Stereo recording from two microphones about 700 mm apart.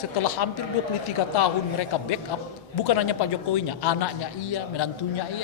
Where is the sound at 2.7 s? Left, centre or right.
Left.